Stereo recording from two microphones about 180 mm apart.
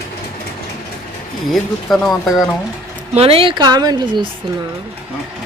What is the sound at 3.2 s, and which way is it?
Speech, 30° right (ahead or behind).